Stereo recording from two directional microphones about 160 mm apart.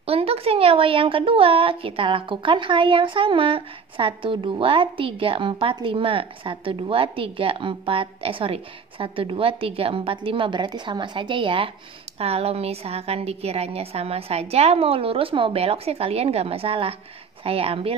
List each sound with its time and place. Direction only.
0.0 s speech: 40° right (ahead or behind)